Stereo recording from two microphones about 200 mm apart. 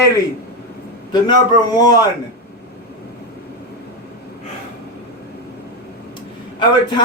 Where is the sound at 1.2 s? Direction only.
20° left (ahead or behind).